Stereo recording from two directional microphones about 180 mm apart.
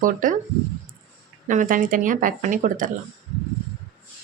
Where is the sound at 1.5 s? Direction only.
45° right (ahead or behind).